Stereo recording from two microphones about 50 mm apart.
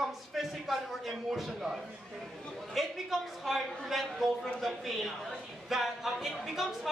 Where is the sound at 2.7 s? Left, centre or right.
Centre.